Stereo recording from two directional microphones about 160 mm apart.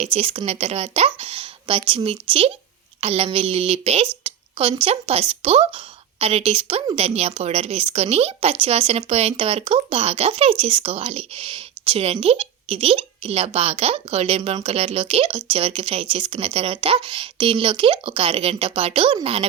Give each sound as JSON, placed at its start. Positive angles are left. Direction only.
{"t": 0.0, "sound": "speech", "side_deg": -35}